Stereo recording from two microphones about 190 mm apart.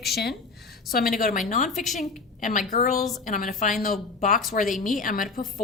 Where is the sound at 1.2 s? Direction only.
45° left (ahead or behind).